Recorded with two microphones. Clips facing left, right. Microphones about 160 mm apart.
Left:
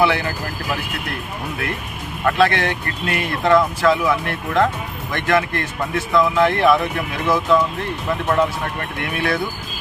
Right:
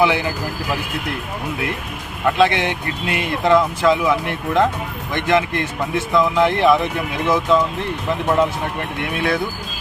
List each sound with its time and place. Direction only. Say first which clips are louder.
0.0 s speech: right 1 dB; 15° right (ahead or behind)
2.2 s speech: right 1 dB; 15° right (ahead or behind)
9.0 s speech: right 1 dB; 20° right (ahead or behind)